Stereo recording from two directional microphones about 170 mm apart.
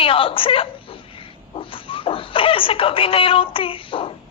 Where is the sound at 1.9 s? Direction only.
30° left (ahead or behind).